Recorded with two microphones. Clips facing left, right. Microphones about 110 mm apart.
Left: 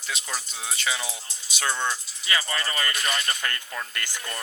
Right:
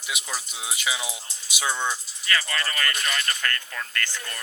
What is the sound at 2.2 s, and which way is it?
Speech, 15° left (ahead or behind).